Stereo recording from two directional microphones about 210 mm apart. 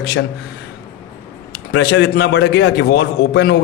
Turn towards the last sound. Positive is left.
turn(degrees=55)  # may be behind; listen again after turning